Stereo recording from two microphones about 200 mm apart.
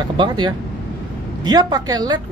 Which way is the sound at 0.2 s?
25° right (ahead or behind).